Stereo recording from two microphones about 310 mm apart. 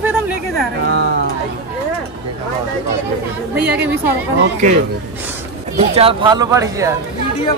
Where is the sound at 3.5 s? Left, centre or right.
Centre.